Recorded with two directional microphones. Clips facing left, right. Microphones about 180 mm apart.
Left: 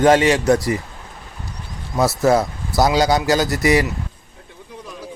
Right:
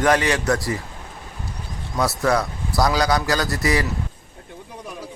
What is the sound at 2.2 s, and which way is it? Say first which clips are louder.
Speech: left 5 dB; 25° left (ahead or behind).